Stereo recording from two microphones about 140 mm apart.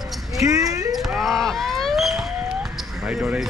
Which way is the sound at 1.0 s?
Centre (ahead or behind).